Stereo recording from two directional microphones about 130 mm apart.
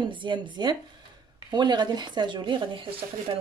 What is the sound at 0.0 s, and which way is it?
Speech, 40° right (ahead or behind).